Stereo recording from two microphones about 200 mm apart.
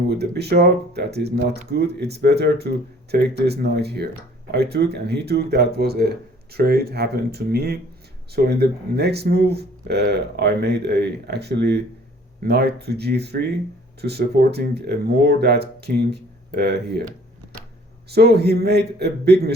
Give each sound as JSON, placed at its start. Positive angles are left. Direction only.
{"t": 0.1, "sound": "speech", "side_deg": -55}
{"t": 18.1, "sound": "speech", "side_deg": -55}